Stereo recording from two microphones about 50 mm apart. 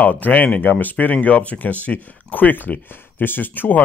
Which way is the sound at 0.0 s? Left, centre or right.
Left.